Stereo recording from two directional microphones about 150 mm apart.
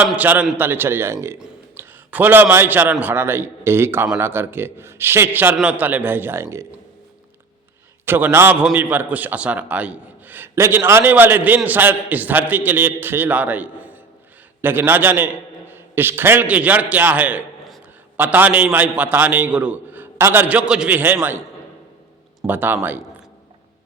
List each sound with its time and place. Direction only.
0.2 s a man's voice: 10° right (ahead or behind)
8.0 s a man's voice: 15° right (ahead or behind)
22.4 s a man's voice: 10° right (ahead or behind)